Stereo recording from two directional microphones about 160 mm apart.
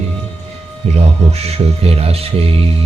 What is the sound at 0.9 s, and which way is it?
Speech, 40° right (ahead or behind).